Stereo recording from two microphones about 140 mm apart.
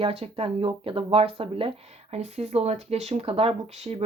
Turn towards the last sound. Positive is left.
turn(degrees=-45)  # may be behind; listen again after turning